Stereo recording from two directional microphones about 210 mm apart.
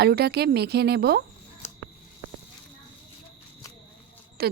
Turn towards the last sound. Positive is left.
turn(degrees=-50)  # may be behind; listen again after turning